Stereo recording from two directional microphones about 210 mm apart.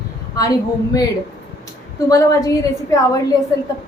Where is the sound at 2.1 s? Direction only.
15° left (ahead or behind).